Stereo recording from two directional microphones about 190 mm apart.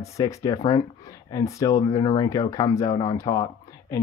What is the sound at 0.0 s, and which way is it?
Speech, 15° left (ahead or behind).